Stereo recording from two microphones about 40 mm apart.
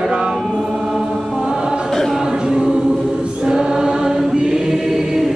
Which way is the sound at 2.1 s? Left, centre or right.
Centre.